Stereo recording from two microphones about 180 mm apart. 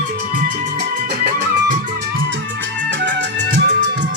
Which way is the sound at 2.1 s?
90° right.